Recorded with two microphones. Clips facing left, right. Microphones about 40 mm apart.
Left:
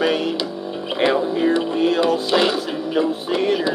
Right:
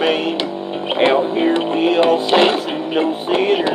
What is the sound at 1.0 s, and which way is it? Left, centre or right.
Music, right.